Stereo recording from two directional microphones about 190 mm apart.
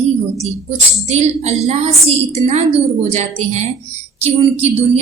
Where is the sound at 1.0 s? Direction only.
35° right (ahead or behind).